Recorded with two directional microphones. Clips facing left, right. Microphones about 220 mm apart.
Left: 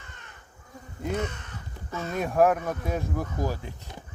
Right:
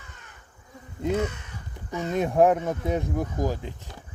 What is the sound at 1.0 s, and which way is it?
Speech, 10° right (ahead or behind).